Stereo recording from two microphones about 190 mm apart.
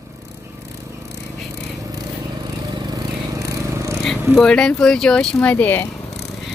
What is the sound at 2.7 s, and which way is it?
Vehicle, 20° right (ahead or behind).